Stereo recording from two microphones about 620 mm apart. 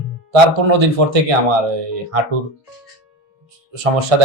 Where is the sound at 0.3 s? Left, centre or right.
Right.